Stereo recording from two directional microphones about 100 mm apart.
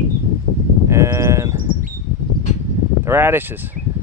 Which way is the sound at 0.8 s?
30° right (ahead or behind).